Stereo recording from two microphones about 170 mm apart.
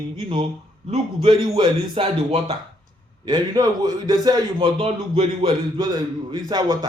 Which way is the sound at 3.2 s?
20° right (ahead or behind).